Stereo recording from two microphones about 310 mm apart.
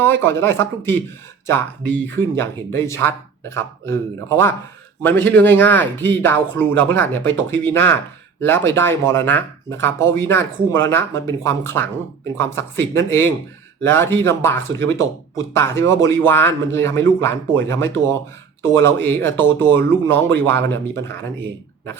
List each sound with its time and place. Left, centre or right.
0.0 s speech: centre
2.3 s speech: centre